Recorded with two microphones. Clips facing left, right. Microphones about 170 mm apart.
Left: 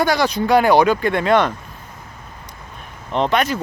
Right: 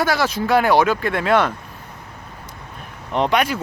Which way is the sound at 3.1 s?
10° right (ahead or behind).